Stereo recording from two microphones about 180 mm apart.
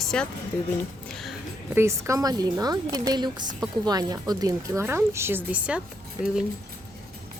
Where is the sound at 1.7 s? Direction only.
15° right (ahead or behind).